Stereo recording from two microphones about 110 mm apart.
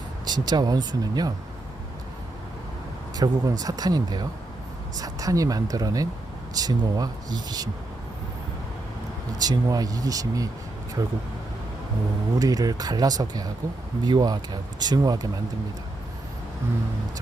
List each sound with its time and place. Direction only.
0.3 s speech: 40° right (ahead or behind)
3.2 s speech: 35° right (ahead or behind)
9.4 s speech: 35° right (ahead or behind)
12.4 s speech: 35° right (ahead or behind)